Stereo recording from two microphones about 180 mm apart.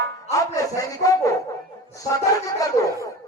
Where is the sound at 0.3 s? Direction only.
20° left (ahead or behind).